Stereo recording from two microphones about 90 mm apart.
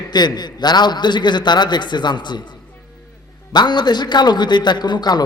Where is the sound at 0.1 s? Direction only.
55° left (ahead or behind).